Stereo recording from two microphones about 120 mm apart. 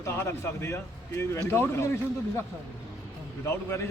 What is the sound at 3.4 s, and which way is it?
Speech, 20° left (ahead or behind).